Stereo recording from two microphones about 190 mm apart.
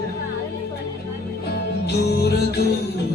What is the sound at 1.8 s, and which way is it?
Music, 60° left (ahead or behind).